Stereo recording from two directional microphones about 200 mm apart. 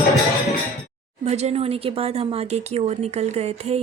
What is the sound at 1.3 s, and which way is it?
A woman's voice, 35° right (ahead or behind).